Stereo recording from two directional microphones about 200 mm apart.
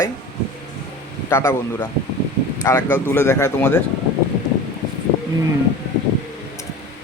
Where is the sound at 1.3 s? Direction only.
10° left (ahead or behind).